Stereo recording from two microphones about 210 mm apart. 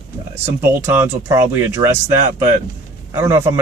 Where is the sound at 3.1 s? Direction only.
15° right (ahead or behind).